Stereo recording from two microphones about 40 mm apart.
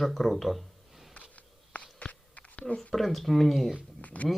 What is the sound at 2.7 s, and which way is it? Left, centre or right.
Speech, centre.